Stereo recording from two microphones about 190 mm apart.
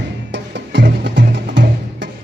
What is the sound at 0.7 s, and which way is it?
Music, 65° right (ahead or behind).